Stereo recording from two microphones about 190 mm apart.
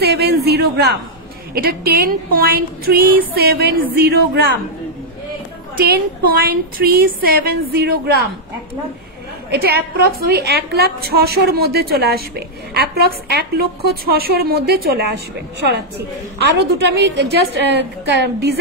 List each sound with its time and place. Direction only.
0.0 s a woman's voice: 55° right (ahead or behind)
5.9 s speech: 55° right (ahead or behind)
9.5 s a woman's voice: 55° right (ahead or behind)
16.3 s a woman's voice: 65° right (ahead or behind)